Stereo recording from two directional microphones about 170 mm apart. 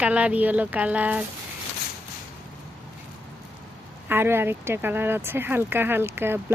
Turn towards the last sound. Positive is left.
turn(degrees=-15)  # may be behind; listen again after turning